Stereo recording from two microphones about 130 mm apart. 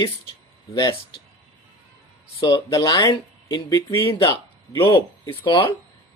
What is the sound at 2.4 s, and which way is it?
Speech, 25° left (ahead or behind).